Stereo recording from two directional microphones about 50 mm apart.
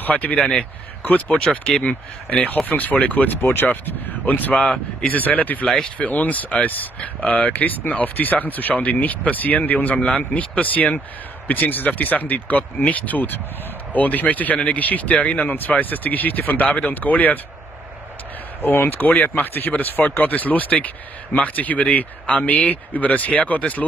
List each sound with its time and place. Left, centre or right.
0.0 s speech: left
1.6 s speech: left
18.6 s speech: left